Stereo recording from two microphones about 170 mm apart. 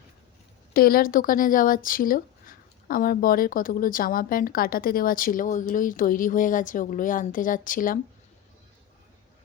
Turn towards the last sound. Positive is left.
turn(degrees=55)  # may be behind; listen again after turning